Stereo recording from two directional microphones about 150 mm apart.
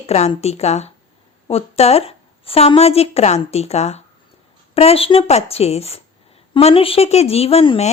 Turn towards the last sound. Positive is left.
turn(degrees=40)  # may be behind; listen again after turning